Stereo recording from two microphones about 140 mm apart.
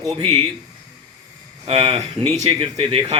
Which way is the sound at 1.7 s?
40° right (ahead or behind).